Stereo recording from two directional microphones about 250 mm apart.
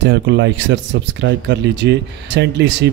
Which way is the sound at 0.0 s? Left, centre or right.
Right.